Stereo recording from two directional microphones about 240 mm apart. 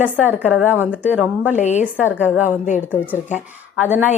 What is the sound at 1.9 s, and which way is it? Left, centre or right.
A woman's voice, centre.